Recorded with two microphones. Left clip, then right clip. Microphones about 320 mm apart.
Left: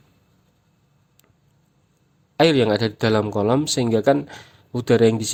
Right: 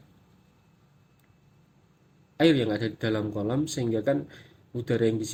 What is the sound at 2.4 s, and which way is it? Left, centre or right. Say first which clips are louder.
Speech: left 7 dB; left.